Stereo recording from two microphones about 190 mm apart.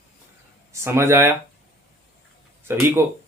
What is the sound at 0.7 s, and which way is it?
Speech, 15° right (ahead or behind).